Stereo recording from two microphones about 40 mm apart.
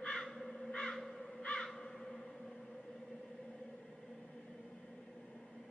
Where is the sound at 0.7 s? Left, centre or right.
Left.